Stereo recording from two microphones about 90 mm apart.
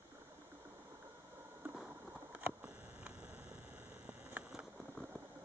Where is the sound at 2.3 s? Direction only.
15° right (ahead or behind).